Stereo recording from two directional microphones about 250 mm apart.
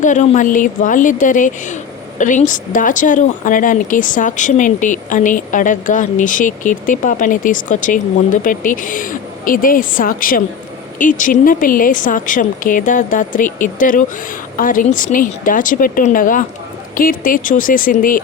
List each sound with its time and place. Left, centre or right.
0.0 s a woman's voice: left